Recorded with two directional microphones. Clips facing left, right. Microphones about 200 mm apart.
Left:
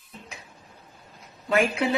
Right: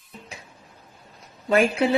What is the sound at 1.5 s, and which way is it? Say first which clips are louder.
Speech: right 4 dB; 35° right (ahead or behind).